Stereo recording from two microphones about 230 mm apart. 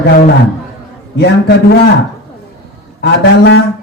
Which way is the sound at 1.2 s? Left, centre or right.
Left.